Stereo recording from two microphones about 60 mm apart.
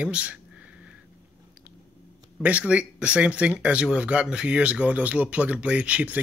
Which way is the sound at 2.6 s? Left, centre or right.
Centre.